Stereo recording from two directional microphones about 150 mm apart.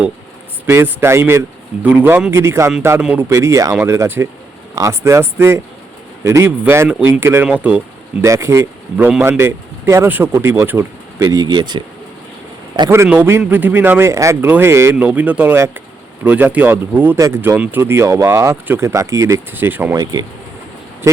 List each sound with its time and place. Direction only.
0.7 s speech: 15° right (ahead or behind)
3.2 s speech: 20° right (ahead or behind)
8.2 s speech: 20° right (ahead or behind)
12.9 s speech: 15° right (ahead or behind)